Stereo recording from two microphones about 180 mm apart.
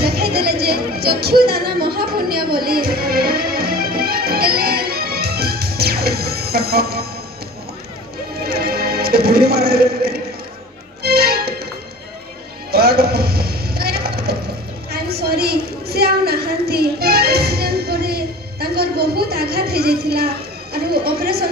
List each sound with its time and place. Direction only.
0.0 s music: 60° right (ahead or behind)
8.5 s music: 60° right (ahead or behind)
12.7 s a sound: 60° right (ahead or behind)